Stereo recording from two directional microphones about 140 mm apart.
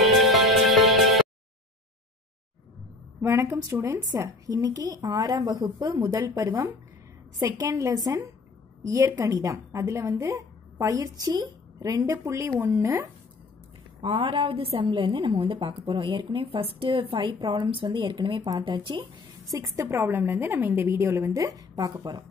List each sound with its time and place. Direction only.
0.0 s music: centre (ahead or behind)
3.2 s a woman's voice: 20° right (ahead or behind)
14.0 s a woman's voice: 40° right (ahead or behind)
19.5 s a woman's voice: 25° right (ahead or behind)